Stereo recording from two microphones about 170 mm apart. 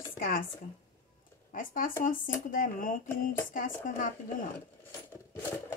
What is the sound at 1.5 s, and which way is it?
Speech, 55° left (ahead or behind).